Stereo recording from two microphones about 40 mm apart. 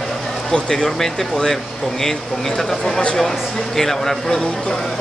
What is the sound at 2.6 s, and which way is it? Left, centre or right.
Speech, centre.